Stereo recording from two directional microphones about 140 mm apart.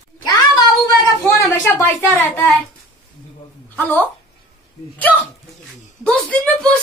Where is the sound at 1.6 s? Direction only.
15° left (ahead or behind).